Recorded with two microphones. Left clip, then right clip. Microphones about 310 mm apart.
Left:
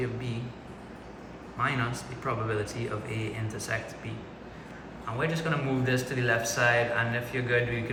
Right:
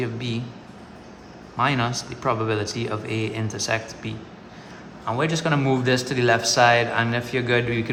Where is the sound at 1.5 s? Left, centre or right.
Centre.